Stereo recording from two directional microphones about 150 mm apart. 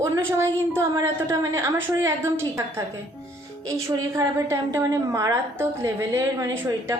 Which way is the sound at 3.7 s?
20° right (ahead or behind).